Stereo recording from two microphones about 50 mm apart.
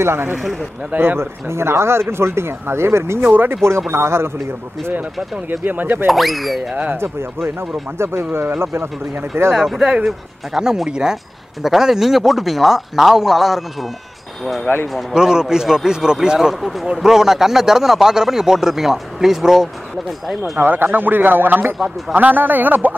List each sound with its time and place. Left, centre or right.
0.0 s speech: right
0.4 s speech: centre
0.9 s speech: right
5.5 s speech: right
6.0 s speech: centre
6.7 s speech: right
8.0 s speech: right
9.5 s speech: centre
15.1 s speech: centre
20.1 s speech: centre
20.5 s speech: right